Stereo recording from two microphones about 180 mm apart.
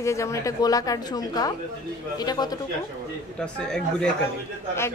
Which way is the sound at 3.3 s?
5° left (ahead or behind).